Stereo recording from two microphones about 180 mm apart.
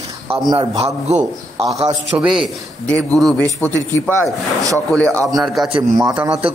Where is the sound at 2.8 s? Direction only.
5° left (ahead or behind).